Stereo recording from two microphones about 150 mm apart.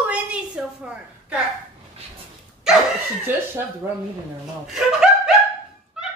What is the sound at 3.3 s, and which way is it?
Speech, 15° right (ahead or behind).